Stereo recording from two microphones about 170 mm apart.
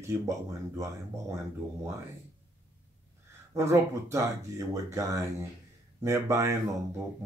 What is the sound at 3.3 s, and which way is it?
Speech, 15° right (ahead or behind).